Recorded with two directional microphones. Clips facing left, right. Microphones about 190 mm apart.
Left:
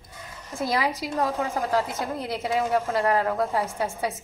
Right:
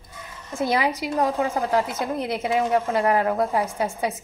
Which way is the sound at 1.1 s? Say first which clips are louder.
Right 4 dB; 15° right (ahead or behind).